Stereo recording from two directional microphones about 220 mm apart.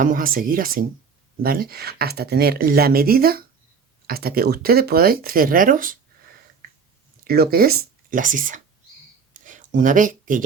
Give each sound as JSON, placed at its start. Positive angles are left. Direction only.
{"t": 0.0, "sound": "speech", "side_deg": -40}
{"t": 7.3, "sound": "speech", "side_deg": -45}
{"t": 9.3, "sound": "a sound", "side_deg": -35}